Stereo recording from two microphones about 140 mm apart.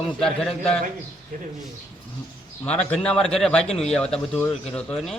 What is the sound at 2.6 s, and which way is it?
Speech, 5° left (ahead or behind).